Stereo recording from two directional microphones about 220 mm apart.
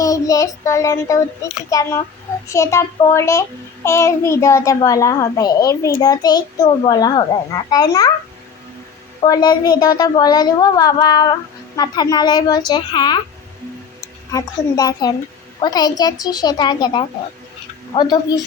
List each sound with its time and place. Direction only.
0.0 s a child's voice: 15° left (ahead or behind)
9.2 s a child's voice: 20° left (ahead or behind)